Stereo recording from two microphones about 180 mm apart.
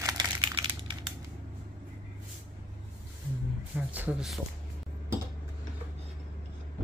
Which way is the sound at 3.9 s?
5° right (ahead or behind).